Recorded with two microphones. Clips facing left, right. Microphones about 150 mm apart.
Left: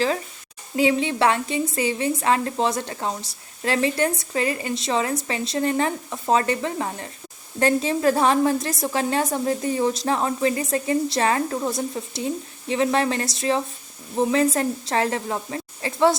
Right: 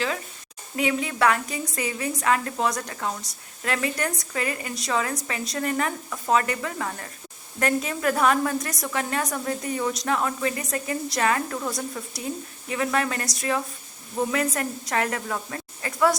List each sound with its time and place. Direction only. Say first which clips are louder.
0.8 s a woman's voice: left 4 dB; 30° left (ahead or behind)